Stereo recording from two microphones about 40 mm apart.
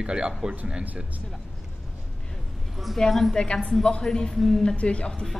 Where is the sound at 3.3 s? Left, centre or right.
Left.